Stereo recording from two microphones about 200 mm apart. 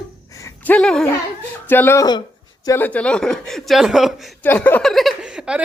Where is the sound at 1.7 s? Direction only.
10° left (ahead or behind).